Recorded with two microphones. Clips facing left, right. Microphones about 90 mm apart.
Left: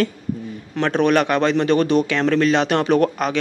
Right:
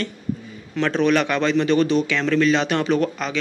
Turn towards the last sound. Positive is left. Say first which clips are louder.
# left 4 dB
turn(degrees=55)  # may be behind; listen again after turning